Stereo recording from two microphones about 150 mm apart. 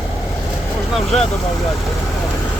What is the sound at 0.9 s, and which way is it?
Speech, 5° left (ahead or behind).